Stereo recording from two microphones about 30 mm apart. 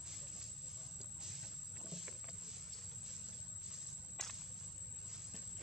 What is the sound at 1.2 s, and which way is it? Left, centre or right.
Music, centre.